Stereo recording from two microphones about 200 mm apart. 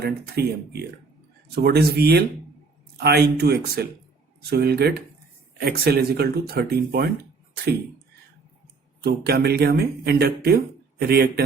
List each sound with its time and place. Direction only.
0.0 s speech: 55° right (ahead or behind)
9.0 s speech: 55° right (ahead or behind)